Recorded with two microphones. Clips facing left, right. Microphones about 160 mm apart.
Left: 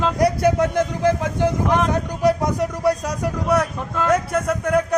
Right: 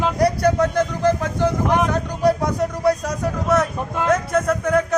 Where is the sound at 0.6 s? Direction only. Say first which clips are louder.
Even; 15° left (ahead or behind).